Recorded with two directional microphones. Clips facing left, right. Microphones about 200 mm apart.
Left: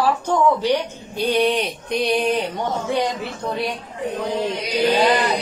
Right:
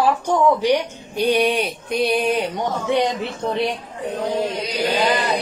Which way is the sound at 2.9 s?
20° right (ahead or behind).